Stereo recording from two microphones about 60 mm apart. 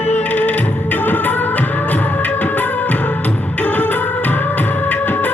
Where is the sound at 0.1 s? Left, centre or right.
Left.